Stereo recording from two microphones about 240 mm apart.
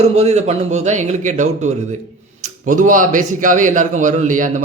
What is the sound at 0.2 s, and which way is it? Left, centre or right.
A man's voice, right.